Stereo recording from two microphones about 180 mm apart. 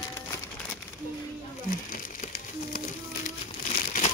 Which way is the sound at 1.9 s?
55° left (ahead or behind).